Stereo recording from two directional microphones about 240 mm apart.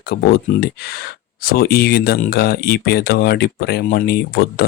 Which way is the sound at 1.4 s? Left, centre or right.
Left.